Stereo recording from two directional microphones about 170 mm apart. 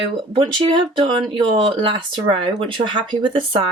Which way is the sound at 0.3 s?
30° right (ahead or behind).